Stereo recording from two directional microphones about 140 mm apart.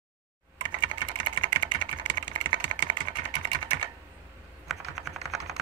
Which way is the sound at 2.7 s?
35° right (ahead or behind).